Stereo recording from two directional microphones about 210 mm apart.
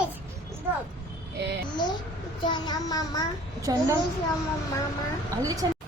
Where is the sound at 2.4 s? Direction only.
20° left (ahead or behind).